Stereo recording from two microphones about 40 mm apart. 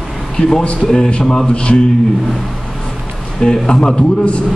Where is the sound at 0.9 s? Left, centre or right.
Left.